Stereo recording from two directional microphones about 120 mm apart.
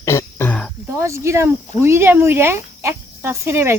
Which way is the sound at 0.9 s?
25° right (ahead or behind).